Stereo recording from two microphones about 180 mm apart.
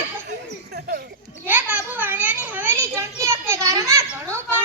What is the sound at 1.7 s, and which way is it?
Children playing, 10° right (ahead or behind).